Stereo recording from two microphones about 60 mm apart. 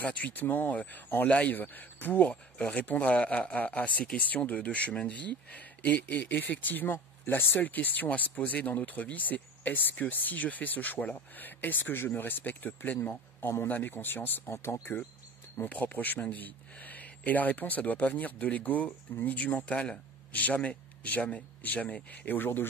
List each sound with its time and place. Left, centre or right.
0.0 s speech: left
15.7 s speech: left